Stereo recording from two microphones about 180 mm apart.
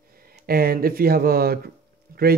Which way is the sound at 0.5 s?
55° right (ahead or behind).